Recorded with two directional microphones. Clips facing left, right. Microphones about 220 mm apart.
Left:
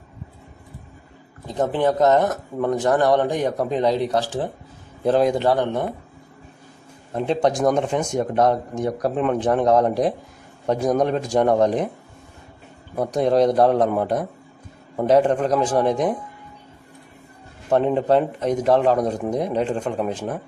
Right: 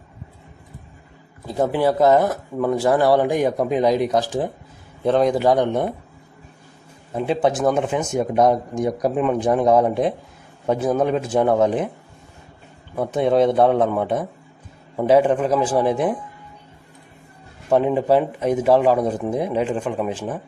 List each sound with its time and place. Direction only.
1.5 s speech: 10° right (ahead or behind)
5.0 s speech: centre (ahead or behind)
5.4 s speech: 15° right (ahead or behind)
7.1 s a man's voice: 5° right (ahead or behind)
13.0 s speech: 5° right (ahead or behind)
17.6 s speech: 5° right (ahead or behind)